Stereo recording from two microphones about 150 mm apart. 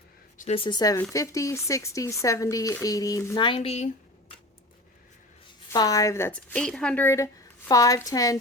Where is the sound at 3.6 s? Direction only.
50° left (ahead or behind).